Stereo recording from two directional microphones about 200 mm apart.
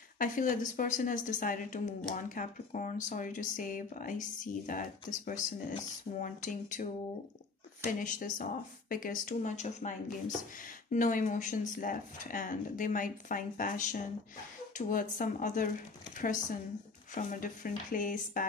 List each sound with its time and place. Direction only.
0.2 s speech: 40° left (ahead or behind)
8.0 s speech: 40° left (ahead or behind)
17.1 s speech: 45° left (ahead or behind)